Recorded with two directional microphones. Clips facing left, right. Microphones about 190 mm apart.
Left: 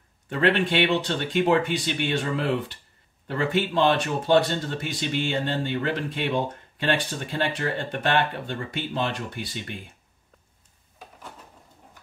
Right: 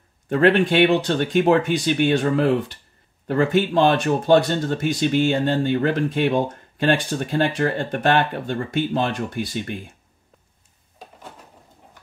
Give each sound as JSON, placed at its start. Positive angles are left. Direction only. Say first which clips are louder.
{"t": 0.3, "sound": "speech", "louder": "right 6 dB", "side_deg": -45}